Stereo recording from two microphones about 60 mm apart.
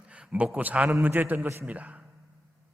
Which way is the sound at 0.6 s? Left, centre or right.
Right.